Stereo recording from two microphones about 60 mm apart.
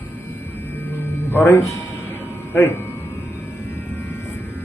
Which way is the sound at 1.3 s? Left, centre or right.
Left.